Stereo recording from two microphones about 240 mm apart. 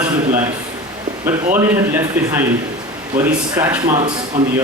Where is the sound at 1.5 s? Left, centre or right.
Centre.